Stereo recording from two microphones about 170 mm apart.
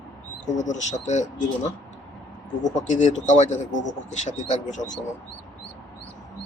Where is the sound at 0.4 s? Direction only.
45° left (ahead or behind).